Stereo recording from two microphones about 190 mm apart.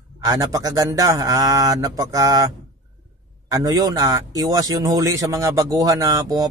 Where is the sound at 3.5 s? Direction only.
20° right (ahead or behind).